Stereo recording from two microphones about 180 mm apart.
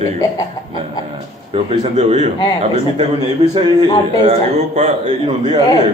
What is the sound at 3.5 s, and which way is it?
Speech, 20° right (ahead or behind).